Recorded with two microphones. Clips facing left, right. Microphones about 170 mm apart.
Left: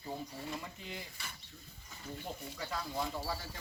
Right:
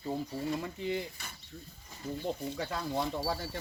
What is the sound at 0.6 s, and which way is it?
Speech, 65° right (ahead or behind).